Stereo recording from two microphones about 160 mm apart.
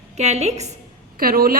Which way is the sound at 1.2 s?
65° right (ahead or behind).